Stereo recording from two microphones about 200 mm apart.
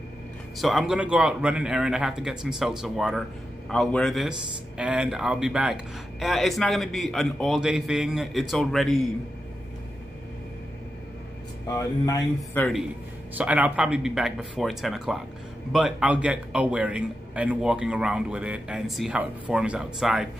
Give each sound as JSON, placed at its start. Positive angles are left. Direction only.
{"t": 0.6, "sound": "speech", "side_deg": 0}
{"t": 11.6, "sound": "speech", "side_deg": 15}
{"t": 13.4, "sound": "speech", "side_deg": -5}